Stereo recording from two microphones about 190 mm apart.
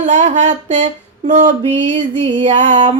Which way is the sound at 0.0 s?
35° right (ahead or behind).